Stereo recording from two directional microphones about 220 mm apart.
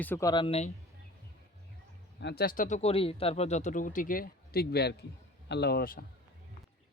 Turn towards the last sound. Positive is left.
turn(degrees=45)  # may be behind; listen again after turning